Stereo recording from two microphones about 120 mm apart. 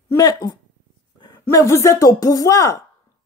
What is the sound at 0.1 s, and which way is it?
A man's voice, 30° left (ahead or behind).